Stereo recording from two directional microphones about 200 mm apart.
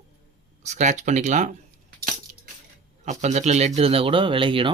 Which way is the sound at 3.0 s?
35° right (ahead or behind).